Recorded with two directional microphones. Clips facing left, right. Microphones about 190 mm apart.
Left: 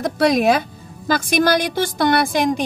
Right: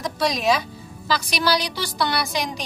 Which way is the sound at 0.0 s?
55° left (ahead or behind).